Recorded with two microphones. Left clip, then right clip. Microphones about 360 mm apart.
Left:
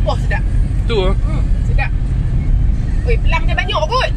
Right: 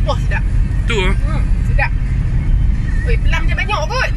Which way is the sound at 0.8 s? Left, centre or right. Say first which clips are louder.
Left 1 dB; centre.